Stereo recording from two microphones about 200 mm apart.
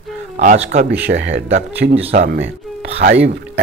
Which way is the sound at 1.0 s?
60° right (ahead or behind).